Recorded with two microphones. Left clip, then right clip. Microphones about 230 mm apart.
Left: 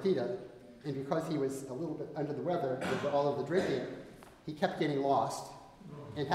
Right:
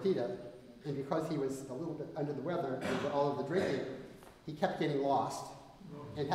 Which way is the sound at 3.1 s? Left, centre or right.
Left.